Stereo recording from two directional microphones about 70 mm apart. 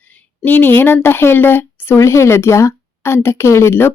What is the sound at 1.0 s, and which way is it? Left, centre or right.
Speech, left.